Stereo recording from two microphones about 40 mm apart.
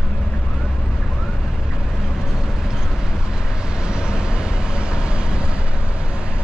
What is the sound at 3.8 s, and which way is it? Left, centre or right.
Vehicle, right.